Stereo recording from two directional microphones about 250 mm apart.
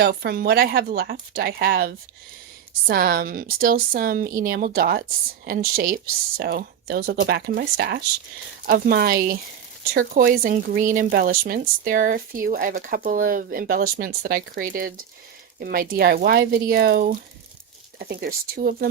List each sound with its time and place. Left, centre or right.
0.0 s speech: right